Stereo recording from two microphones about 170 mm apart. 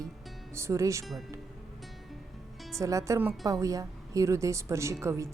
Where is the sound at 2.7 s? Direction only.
20° right (ahead or behind).